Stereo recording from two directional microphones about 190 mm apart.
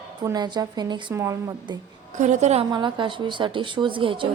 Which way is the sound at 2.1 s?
40° right (ahead or behind).